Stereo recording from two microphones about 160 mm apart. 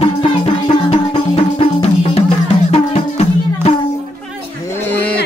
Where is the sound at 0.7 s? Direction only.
35° left (ahead or behind).